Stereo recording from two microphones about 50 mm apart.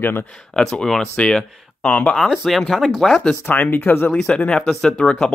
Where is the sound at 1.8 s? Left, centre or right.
Left.